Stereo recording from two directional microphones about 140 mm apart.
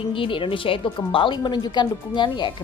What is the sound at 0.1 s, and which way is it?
A woman's voice, 40° left (ahead or behind).